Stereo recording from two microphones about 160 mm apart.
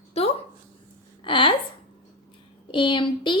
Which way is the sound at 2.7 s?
30° left (ahead or behind).